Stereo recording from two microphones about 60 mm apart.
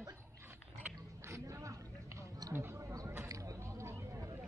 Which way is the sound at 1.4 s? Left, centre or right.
Right.